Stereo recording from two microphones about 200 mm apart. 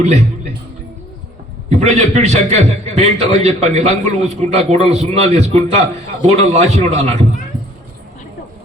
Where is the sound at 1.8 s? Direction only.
35° right (ahead or behind).